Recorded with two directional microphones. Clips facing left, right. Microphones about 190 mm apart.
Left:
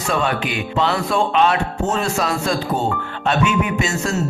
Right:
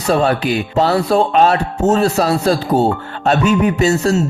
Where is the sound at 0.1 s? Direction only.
35° right (ahead or behind).